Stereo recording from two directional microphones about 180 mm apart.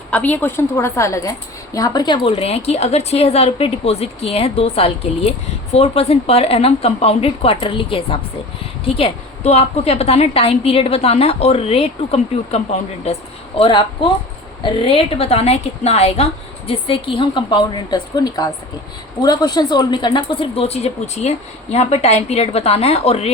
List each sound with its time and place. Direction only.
0.1 s a woman's voice: 10° left (ahead or behind); by 23.3 s 35° left (ahead or behind)